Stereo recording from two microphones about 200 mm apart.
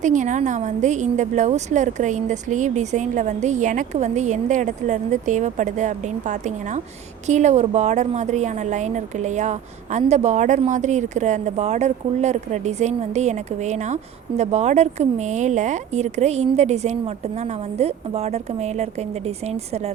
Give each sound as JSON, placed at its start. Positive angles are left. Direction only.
{"t": 0.0, "sound": "a woman's voice", "side_deg": -40}